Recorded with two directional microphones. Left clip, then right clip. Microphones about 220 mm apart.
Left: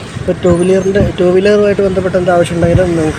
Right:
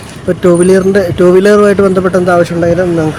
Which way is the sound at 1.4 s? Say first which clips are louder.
Right 2 dB; 30° right (ahead or behind).